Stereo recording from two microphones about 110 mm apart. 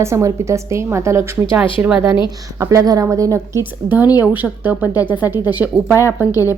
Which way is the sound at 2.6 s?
30° right (ahead or behind).